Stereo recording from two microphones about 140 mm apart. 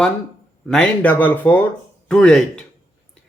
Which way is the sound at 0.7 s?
10° left (ahead or behind).